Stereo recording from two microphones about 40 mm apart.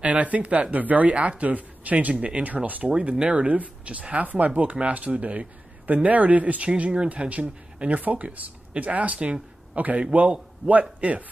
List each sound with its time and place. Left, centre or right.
0.0 s speech: right
2.1 s speech: right
2.4 s speech: right
2.9 s speech: right
3.4 s speech: right